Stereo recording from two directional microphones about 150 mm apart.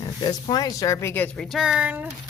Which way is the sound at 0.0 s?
30° left (ahead or behind).